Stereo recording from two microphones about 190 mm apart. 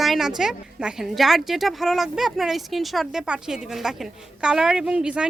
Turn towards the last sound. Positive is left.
turn(degrees=-5)  # may be behind; listen again after turning